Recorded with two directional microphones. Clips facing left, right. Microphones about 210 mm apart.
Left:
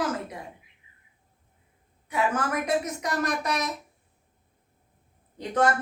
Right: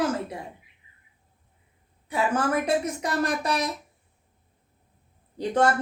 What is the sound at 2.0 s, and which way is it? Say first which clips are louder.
A woman's voice: right 2 dB; 30° right (ahead or behind).